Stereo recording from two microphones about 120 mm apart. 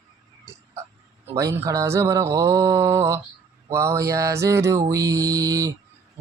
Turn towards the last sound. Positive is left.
turn(degrees=-30)  # may be behind; listen again after turning